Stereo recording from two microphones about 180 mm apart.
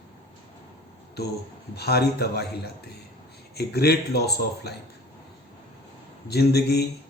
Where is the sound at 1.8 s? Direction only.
65° left (ahead or behind).